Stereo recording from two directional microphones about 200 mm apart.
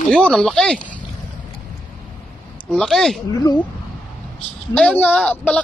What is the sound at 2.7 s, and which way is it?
Speech, 5° left (ahead or behind).